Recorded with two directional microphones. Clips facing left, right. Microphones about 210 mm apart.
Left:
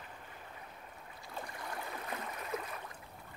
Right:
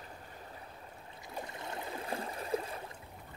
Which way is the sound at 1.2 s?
20° right (ahead or behind).